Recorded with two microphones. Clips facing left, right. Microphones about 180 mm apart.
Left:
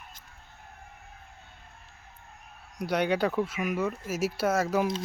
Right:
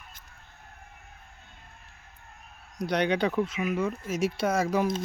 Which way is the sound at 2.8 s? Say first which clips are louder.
Right 1 dB; 5° left (ahead or behind).